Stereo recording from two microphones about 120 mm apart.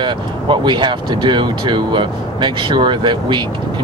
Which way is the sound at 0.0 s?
40° right (ahead or behind).